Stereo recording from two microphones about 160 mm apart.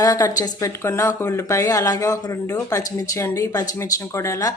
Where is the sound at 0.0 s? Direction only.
20° left (ahead or behind).